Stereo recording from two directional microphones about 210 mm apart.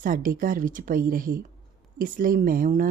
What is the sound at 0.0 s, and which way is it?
Speech, 40° right (ahead or behind).